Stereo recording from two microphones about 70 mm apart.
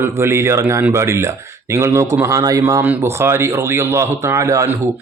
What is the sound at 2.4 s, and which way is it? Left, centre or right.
Speech, right.